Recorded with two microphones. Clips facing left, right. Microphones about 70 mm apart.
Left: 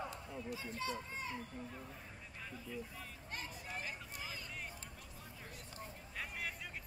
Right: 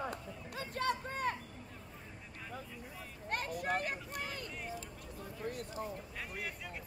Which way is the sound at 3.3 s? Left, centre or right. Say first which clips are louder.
Right 12 dB; right.